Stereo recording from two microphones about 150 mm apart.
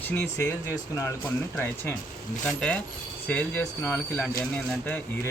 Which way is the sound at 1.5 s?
15° left (ahead or behind).